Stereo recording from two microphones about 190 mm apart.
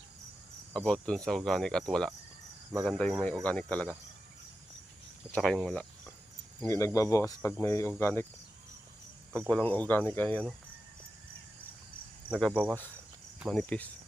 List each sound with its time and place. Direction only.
0.7 s cricket: 5° left (ahead or behind)
5.3 s cricket: centre (ahead or behind)
6.7 s cricket: 15° left (ahead or behind)
9.5 s cricket: 5° left (ahead or behind)
12.3 s cricket: 5° left (ahead or behind)